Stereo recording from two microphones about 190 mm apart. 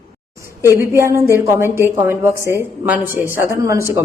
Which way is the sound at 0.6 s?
15° right (ahead or behind).